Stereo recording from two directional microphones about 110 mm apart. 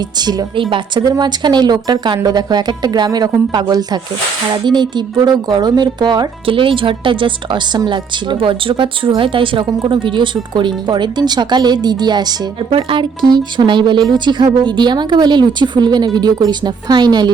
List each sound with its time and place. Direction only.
0.2 s speech: 40° right (ahead or behind)